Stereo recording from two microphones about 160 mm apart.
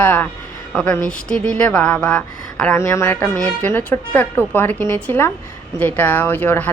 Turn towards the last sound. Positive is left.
turn(degrees=10)  # may be behind; listen again after turning